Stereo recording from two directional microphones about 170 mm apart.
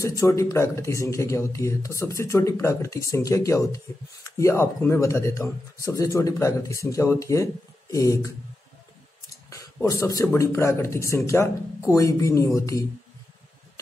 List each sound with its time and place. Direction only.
0.0 s speech: 20° left (ahead or behind)
9.3 s speech: 20° left (ahead or behind)